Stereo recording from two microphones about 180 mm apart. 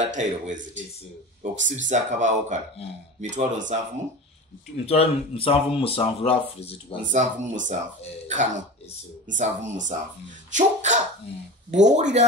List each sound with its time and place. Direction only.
0.1 s speech: 45° right (ahead or behind)
4.8 s speech: 35° left (ahead or behind)
7.1 s speech: 45° right (ahead or behind)